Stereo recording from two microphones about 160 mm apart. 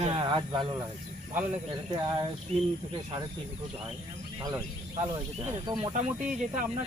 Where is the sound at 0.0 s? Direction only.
30° right (ahead or behind).